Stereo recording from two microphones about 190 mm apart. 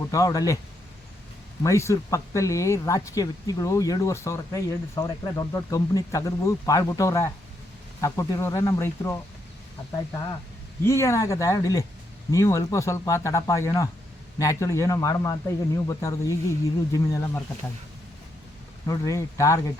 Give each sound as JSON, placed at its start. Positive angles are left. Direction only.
{"t": 0.1, "sound": "speech", "side_deg": 15}
{"t": 1.6, "sound": "speech", "side_deg": 15}
{"t": 10.8, "sound": "speech", "side_deg": 15}
{"t": 18.9, "sound": "speech", "side_deg": 15}